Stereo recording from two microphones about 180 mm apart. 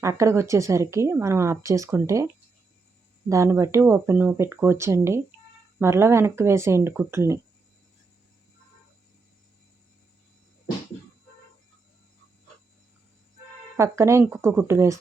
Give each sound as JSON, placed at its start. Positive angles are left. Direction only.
{"t": 0.0, "sound": "speech", "side_deg": -15}
{"t": 3.2, "sound": "speech", "side_deg": -15}
{"t": 13.7, "sound": "speech", "side_deg": -15}